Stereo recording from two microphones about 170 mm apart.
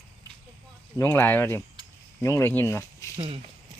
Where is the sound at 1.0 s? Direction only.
10° left (ahead or behind).